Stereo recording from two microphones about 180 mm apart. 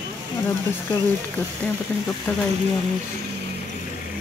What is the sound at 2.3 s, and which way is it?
Speech, 15° left (ahead or behind).